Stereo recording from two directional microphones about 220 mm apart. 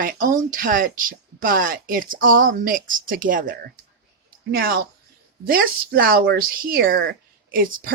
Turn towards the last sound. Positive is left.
turn(degrees=-40)  # may be behind; listen again after turning